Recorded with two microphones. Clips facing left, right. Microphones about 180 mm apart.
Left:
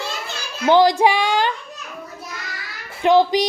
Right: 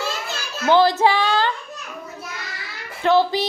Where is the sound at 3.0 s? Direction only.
15° left (ahead or behind).